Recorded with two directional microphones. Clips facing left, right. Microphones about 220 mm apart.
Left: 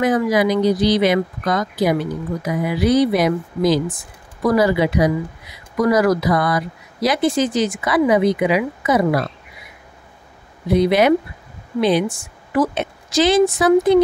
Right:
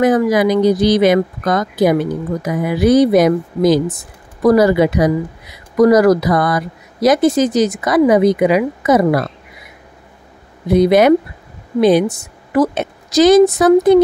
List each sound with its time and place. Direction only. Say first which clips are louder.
0.0 s speech: right 4 dB; 45° right (ahead or behind)
10.7 s a woman's voice: right 4 dB; 45° right (ahead or behind)